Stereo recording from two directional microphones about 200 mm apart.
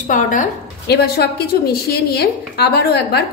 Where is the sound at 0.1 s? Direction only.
40° left (ahead or behind).